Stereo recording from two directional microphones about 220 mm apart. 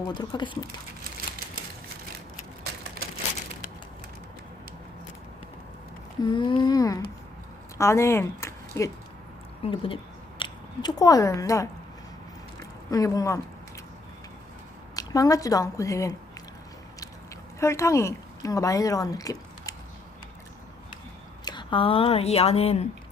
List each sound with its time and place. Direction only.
0.1 s a sound: 20° left (ahead or behind)
6.2 s a sound: 20° left (ahead or behind)
7.8 s speech: 10° left (ahead or behind)
9.6 s speech: 25° left (ahead or behind)
12.9 s a woman's voice: 15° left (ahead or behind)
14.9 s a woman's voice: 15° left (ahead or behind)
17.6 s speech: 15° left (ahead or behind)
21.4 s speech: 20° left (ahead or behind)